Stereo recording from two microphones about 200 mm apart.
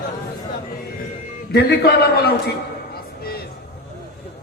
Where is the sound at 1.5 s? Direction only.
50° left (ahead or behind).